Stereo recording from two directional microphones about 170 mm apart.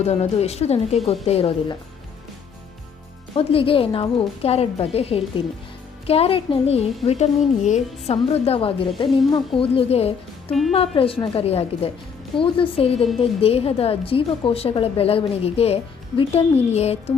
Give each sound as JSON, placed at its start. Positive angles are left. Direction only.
{"t": 0.0, "sound": "a woman's voice", "side_deg": 40}
{"t": 3.3, "sound": "a woman's voice", "side_deg": 30}